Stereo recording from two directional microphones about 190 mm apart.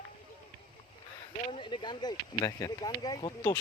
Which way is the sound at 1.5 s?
25° left (ahead or behind).